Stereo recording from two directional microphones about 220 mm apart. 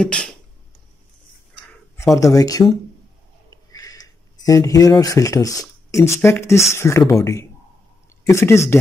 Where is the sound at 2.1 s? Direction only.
15° left (ahead or behind).